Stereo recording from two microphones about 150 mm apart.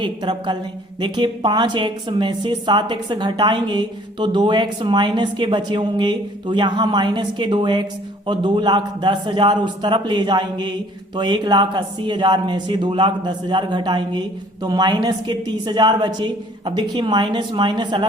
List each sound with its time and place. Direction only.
0.0 s a woman's voice: 30° right (ahead or behind)